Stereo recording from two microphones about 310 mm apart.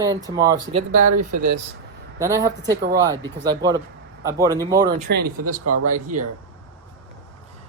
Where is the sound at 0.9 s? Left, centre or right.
Right.